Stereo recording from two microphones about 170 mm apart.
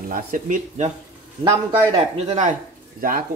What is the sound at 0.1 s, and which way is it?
Speech, 50° right (ahead or behind).